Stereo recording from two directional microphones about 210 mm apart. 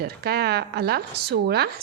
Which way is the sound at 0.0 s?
50° right (ahead or behind).